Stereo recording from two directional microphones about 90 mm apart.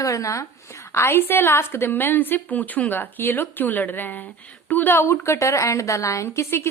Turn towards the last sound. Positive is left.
turn(degrees=30)  # may be behind; listen again after turning